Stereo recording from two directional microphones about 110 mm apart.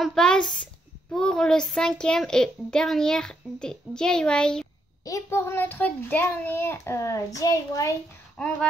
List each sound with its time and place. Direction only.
0.0 s a child's voice: 5° left (ahead or behind)
5.0 s a child's voice: 25° left (ahead or behind)
8.4 s speech: 10° left (ahead or behind)